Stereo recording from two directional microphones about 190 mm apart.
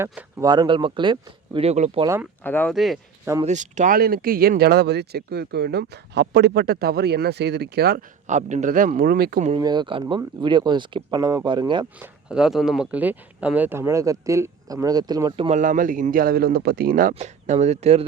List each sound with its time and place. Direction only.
0.1 s speech: 10° right (ahead or behind)
0.4 s speech: 20° right (ahead or behind)
2.0 s speech: 15° right (ahead or behind)
2.4 s speech: 10° left (ahead or behind)
3.4 s speech: 40° right (ahead or behind); by 8.0 s 55° right (ahead or behind)
8.3 s a man's voice: 40° right (ahead or behind)
9.6 s speech: 20° right (ahead or behind)
11.9 s speech: 5° right (ahead or behind); by 18.0 s 35° right (ahead or behind)